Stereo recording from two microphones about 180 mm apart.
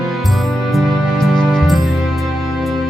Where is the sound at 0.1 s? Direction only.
Centre (ahead or behind).